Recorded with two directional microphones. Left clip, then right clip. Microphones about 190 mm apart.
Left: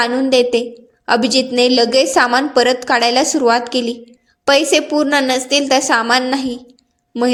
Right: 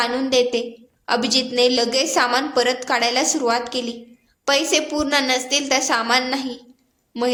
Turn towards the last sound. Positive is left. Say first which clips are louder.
# left 5 dB
turn(degrees=15)  # may be behind; listen again after turning